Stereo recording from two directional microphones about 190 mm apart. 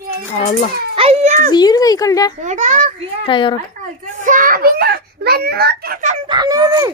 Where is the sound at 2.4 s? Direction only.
40° right (ahead or behind).